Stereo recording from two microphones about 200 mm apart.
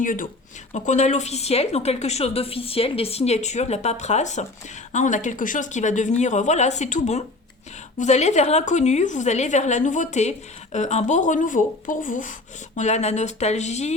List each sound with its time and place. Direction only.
0.0 s a woman's voice: 40° left (ahead or behind)